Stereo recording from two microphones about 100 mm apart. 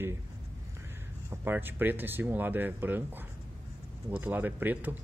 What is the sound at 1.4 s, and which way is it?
Speech, 20° right (ahead or behind).